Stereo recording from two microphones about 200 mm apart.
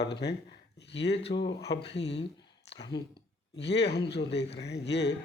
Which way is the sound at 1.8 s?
60° left (ahead or behind).